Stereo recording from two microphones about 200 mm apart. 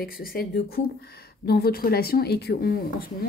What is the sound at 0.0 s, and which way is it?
Speech, 45° left (ahead or behind).